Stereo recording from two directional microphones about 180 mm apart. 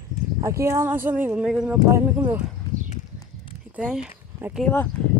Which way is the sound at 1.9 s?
15° right (ahead or behind).